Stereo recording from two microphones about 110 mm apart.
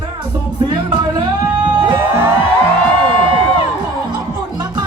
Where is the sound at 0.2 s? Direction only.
45° right (ahead or behind).